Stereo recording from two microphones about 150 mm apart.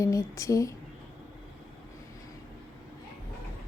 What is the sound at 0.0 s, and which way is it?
Speech, 20° left (ahead or behind).